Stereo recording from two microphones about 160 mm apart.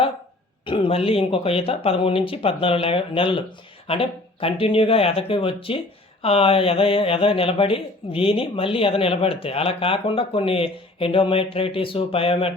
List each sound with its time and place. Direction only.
0.6 s speech: 35° left (ahead or behind)